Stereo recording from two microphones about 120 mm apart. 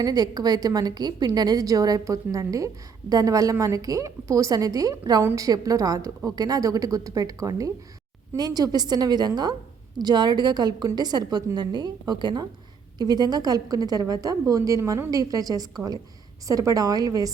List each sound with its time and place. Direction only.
0.0 s a woman's voice: 35° right (ahead or behind)